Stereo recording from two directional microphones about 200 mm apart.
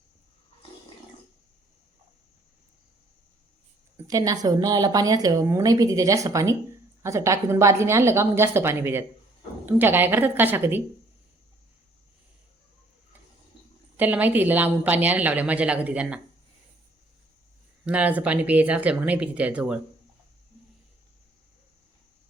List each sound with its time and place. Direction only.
3.9 s speech: 15° right (ahead or behind)
13.9 s speech: 10° right (ahead or behind)
17.8 s speech: 5° right (ahead or behind)